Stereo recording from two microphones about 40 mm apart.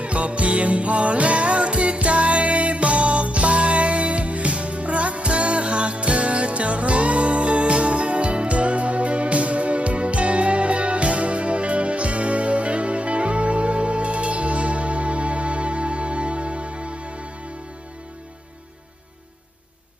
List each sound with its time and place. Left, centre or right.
0.0 s music: right